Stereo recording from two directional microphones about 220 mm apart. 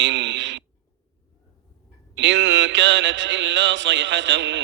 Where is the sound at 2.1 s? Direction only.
55° right (ahead or behind).